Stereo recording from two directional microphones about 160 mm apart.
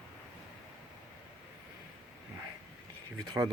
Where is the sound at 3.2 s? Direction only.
25° right (ahead or behind).